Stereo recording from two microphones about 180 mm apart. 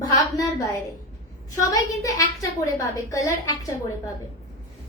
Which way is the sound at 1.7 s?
20° left (ahead or behind).